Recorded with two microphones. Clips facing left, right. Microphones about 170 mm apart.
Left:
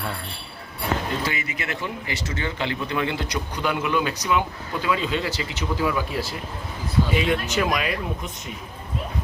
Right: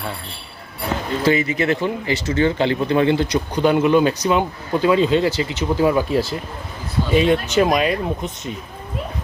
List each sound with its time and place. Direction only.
1.2 s speech: 30° right (ahead or behind)